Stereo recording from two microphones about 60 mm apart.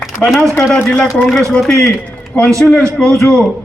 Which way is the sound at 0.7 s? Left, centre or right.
Centre.